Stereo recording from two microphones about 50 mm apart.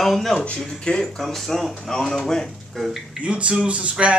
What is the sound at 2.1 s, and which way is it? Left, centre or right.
Speech, centre.